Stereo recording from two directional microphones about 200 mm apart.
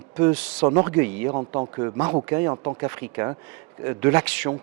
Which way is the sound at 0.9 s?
10° right (ahead or behind).